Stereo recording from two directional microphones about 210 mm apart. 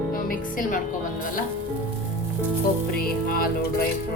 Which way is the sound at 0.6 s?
40° left (ahead or behind).